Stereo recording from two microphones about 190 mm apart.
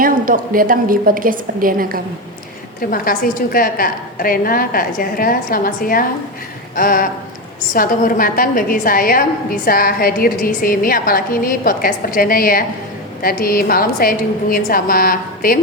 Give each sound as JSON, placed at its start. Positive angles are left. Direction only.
{"t": 0.0, "sound": "a woman's voice", "side_deg": -45}
{"t": 2.9, "sound": "a woman's voice", "side_deg": 45}